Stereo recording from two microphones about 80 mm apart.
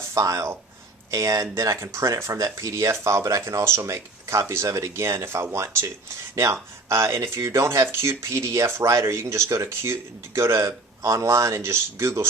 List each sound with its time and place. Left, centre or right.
0.1 s speech: right